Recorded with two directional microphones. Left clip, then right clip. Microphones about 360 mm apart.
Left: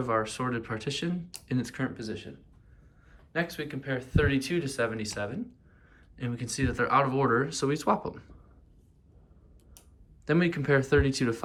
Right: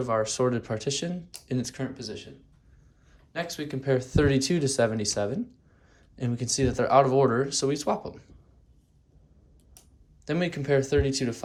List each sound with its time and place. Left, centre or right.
0.0 s speech: centre
10.2 s speech: centre